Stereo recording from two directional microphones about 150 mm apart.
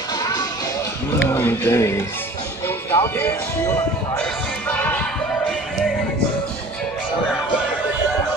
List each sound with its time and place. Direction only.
1.2 s speech: 15° left (ahead or behind)
4.6 s music: 10° left (ahead or behind)